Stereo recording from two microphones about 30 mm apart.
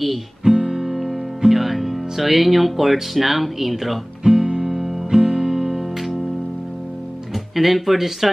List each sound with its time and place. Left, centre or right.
0.4 s guitar: centre
0.9 s music: centre
1.4 s speech: centre
4.2 s guitar: centre
4.6 s music: centre
7.5 s speech: centre